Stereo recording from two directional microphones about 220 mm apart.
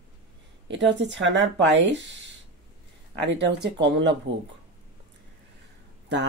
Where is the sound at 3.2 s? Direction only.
50° right (ahead or behind).